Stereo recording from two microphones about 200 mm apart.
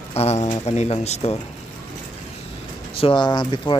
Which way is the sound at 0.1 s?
30° left (ahead or behind).